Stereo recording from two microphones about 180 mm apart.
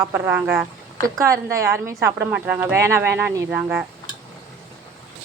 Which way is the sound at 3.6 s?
5° right (ahead or behind).